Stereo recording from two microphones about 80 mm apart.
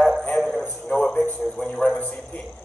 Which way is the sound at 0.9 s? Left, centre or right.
Centre.